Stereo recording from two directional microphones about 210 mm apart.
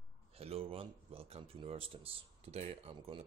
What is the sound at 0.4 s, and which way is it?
Speech, 30° right (ahead or behind).